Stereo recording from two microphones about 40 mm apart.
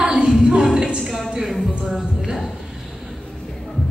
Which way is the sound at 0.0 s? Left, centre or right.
Right.